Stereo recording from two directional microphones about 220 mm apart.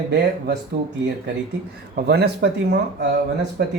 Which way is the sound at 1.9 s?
50° right (ahead or behind).